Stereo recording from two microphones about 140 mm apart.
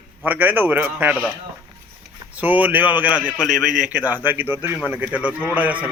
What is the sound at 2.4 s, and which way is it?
A man's voice, 10° right (ahead or behind).